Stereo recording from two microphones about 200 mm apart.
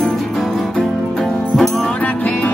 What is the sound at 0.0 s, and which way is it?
Music, centre (ahead or behind).